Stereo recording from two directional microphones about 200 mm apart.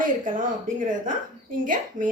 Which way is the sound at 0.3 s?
40° right (ahead or behind).